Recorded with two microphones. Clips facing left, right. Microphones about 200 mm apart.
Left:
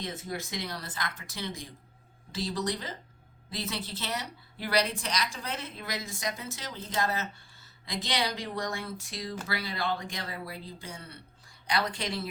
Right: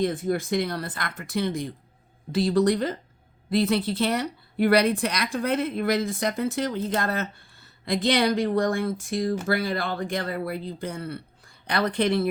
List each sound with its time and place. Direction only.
0.0 s a woman's voice: 55° right (ahead or behind)